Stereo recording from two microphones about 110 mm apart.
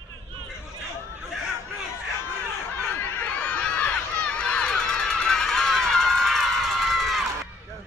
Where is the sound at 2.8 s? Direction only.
15° left (ahead or behind).